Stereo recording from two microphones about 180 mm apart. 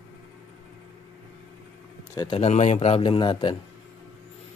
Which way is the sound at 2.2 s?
30° left (ahead or behind).